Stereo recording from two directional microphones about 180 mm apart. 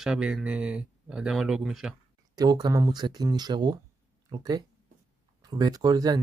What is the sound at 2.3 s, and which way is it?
Speech, 20° right (ahead or behind).